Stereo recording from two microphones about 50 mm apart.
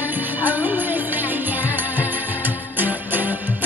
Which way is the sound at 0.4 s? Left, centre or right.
Right.